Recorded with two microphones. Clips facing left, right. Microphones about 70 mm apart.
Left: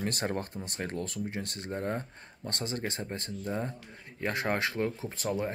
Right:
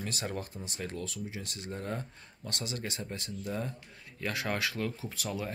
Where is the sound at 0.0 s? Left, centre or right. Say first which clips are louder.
Left 5 dB; left.